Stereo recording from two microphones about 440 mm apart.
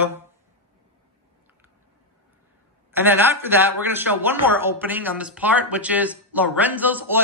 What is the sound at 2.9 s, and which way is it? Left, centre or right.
Speech, centre.